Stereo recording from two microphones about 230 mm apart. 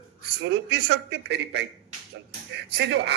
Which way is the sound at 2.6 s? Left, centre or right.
Right.